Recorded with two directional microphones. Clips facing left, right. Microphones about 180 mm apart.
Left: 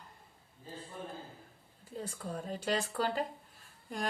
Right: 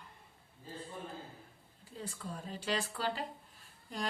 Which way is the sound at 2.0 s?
45° left (ahead or behind).